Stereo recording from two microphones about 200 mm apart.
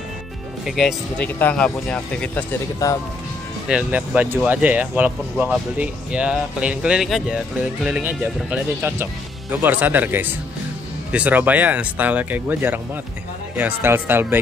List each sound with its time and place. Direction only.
0.7 s speech: centre (ahead or behind)
2.8 s speech: 15° left (ahead or behind)
3.6 s speech: 5° right (ahead or behind)